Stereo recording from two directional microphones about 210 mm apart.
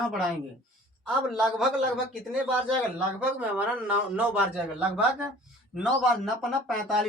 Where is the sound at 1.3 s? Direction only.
Centre (ahead or behind).